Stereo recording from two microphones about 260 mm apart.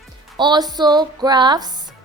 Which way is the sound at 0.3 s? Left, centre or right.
Centre.